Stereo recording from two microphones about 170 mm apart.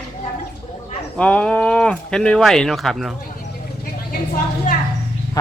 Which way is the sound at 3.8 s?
55° left (ahead or behind).